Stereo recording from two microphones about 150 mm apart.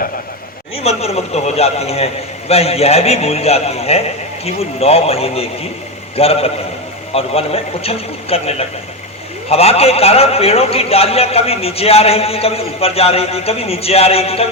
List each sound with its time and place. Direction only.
0.8 s a man's voice: 45° left (ahead or behind)